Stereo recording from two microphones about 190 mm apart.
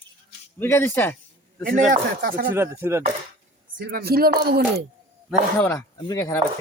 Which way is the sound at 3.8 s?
55° right (ahead or behind).